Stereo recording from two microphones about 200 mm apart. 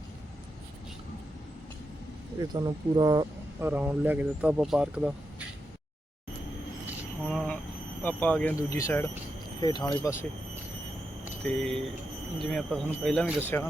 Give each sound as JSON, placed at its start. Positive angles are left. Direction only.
{"t": 2.4, "sound": "speech", "side_deg": -20}
{"t": 3.7, "sound": "speech", "side_deg": -10}
{"t": 7.3, "sound": "vehicle", "side_deg": 5}
{"t": 8.0, "sound": "speech", "side_deg": 5}
{"t": 11.4, "sound": "speech", "side_deg": 5}